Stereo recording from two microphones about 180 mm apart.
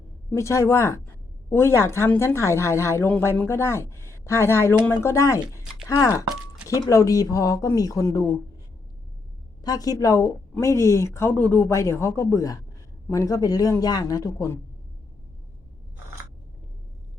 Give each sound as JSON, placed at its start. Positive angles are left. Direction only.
{"t": 0.3, "sound": "a woman's voice", "side_deg": 15}
{"t": 9.6, "sound": "a woman's voice", "side_deg": 20}